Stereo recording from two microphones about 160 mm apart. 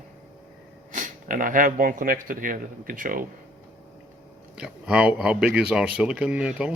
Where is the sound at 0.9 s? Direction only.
55° right (ahead or behind).